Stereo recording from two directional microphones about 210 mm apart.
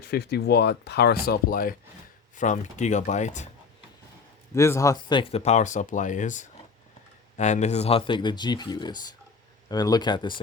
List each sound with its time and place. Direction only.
0.1 s speech: 50° left (ahead or behind); by 3.5 s 35° left (ahead or behind)
4.5 s speech: 15° left (ahead or behind)